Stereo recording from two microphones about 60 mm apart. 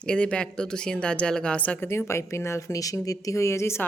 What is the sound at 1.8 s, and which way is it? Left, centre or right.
A woman's voice, left.